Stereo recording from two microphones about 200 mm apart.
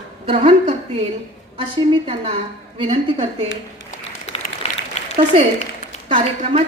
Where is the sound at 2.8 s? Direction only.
35° right (ahead or behind).